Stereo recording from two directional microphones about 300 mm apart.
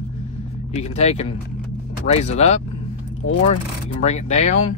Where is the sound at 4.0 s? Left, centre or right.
Left.